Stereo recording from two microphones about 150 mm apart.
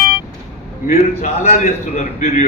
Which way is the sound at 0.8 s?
50° left (ahead or behind).